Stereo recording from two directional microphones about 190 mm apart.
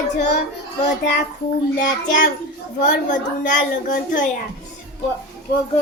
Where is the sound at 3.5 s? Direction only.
45° left (ahead or behind).